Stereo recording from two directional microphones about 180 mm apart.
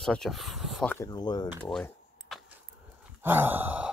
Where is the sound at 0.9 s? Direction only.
20° left (ahead or behind).